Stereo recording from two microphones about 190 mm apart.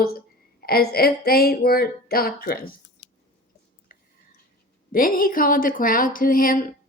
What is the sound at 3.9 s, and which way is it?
Whispering, 50° left (ahead or behind).